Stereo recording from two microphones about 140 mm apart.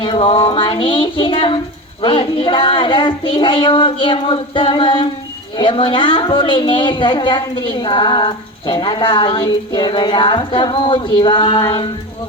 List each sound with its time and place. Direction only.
0.0 s a woman's voice: 35° left (ahead or behind)